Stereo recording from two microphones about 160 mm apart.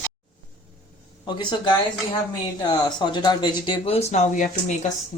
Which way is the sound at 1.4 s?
30° left (ahead or behind).